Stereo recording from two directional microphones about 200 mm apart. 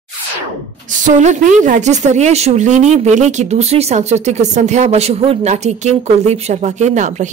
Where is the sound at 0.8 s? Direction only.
40° right (ahead or behind).